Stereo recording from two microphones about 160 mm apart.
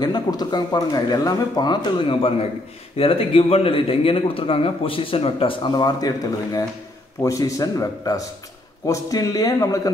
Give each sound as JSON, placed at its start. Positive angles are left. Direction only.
{"t": 0.0, "sound": "a man's voice", "side_deg": 25}